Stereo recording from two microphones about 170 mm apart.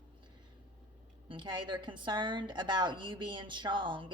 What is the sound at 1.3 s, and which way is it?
A woman's voice, 25° right (ahead or behind).